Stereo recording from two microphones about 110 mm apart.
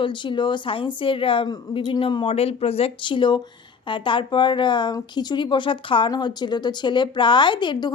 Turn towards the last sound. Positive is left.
turn(degrees=45)  # may be behind; listen again after turning